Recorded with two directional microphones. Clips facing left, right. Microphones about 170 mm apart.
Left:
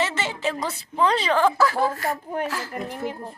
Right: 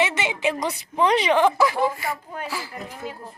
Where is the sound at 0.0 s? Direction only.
15° right (ahead or behind).